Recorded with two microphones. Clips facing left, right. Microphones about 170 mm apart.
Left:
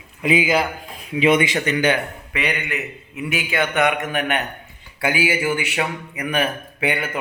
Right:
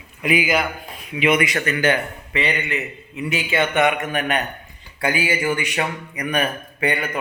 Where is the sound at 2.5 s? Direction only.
Centre (ahead or behind).